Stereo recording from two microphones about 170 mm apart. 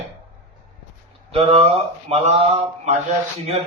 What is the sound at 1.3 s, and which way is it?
Speech, 35° right (ahead or behind).